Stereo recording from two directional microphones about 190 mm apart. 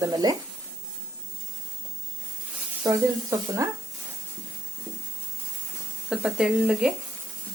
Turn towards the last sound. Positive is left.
turn(degrees=-5)  # may be behind; listen again after turning